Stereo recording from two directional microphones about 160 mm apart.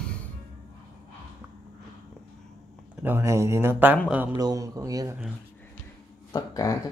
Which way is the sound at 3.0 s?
15° right (ahead or behind).